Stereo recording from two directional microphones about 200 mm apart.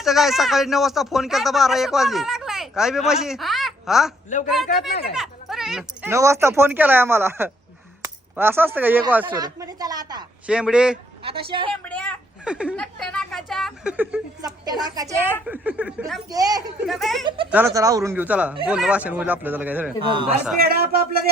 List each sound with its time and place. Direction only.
0.0 s speech: centre (ahead or behind)
4.3 s a man's voice: 35° left (ahead or behind)
5.1 s a sound: centre (ahead or behind)
6.1 s a woman's voice: 15° right (ahead or behind)
10.4 s speech: 5° right (ahead or behind)
11.2 s a woman's voice: 25° right (ahead or behind)
11.7 s a woman's voice: 5° left (ahead or behind)
12.5 s speech: 5° right (ahead or behind)
14.4 s a woman's voice: 20° right (ahead or behind); by 16.2 s centre (ahead or behind)
16.3 s speech: 20° right (ahead or behind)
16.8 s speech: centre (ahead or behind)
17.2 s a woman's voice: 25° right (ahead or behind)
17.5 s speech: 10° right (ahead or behind)
20.6 s a man's voice: 50° right (ahead or behind)